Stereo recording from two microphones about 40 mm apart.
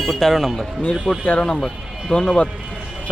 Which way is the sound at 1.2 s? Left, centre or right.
Left.